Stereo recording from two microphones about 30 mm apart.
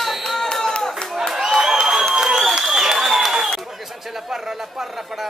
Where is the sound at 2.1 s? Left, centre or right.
Right.